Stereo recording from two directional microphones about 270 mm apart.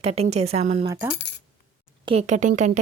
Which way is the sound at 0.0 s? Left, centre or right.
Right.